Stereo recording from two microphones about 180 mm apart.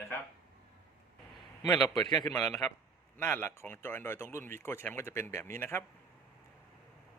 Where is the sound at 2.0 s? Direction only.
25° left (ahead or behind).